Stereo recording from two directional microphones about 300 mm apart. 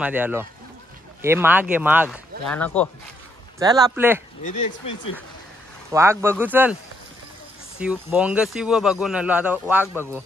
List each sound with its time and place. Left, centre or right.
0.0 s speech: centre
2.0 s speech: centre
3.5 s speech: centre
4.6 s speech: left
5.9 s speech: centre
7.8 s speech: centre